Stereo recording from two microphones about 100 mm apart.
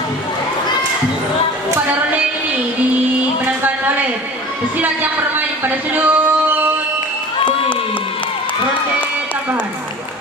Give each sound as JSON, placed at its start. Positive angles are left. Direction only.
{"t": 3.6, "sound": "a sound", "side_deg": -20}
{"t": 4.8, "sound": "speech", "side_deg": -20}
{"t": 5.9, "sound": "singing", "side_deg": -20}